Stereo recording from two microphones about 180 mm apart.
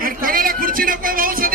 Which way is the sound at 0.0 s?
50° right (ahead or behind).